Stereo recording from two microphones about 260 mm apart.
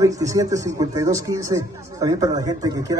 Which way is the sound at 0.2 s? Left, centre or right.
Centre.